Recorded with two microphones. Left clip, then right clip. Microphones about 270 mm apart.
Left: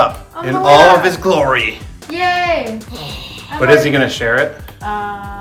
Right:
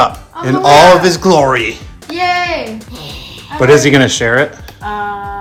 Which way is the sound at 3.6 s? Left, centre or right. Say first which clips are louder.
Right 3 dB; right.